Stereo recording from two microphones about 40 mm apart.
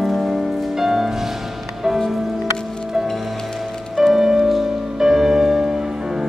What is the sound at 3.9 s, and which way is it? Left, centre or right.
Music, centre.